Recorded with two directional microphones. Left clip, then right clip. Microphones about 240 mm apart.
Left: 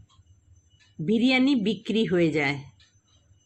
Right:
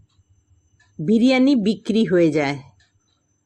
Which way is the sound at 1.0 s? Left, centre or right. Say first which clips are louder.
Right 6 dB; centre.